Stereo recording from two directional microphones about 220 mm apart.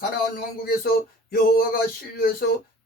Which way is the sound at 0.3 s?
45° left (ahead or behind).